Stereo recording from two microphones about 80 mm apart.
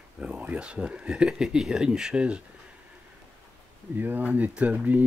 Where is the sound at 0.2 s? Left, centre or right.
Centre.